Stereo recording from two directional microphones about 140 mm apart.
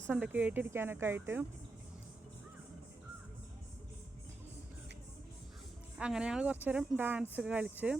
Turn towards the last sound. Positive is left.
turn(degrees=-10)  # may be behind; listen again after turning